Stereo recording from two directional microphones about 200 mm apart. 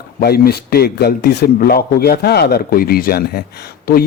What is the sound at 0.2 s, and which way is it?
A man's voice, 50° left (ahead or behind).